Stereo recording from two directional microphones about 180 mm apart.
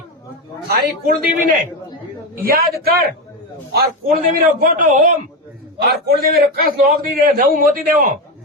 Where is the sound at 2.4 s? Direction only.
55° right (ahead or behind).